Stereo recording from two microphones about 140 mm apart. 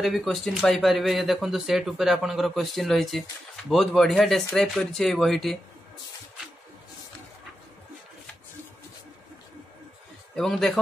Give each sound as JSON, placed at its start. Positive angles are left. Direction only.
{"t": 0.0, "sound": "speech", "side_deg": 0}
{"t": 10.3, "sound": "speech", "side_deg": 5}